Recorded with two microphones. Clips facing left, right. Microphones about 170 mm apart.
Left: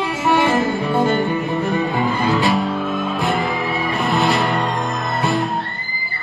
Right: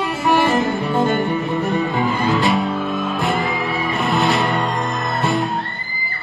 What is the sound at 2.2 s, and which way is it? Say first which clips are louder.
Music: left 1 dB; 15° left (ahead or behind).